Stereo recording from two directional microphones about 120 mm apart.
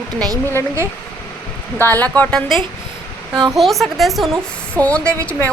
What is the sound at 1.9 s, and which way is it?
Speech, 15° left (ahead or behind).